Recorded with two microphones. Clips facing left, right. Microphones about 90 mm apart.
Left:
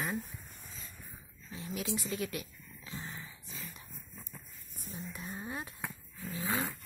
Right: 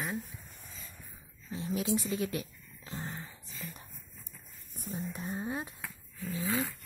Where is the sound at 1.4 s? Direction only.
30° right (ahead or behind).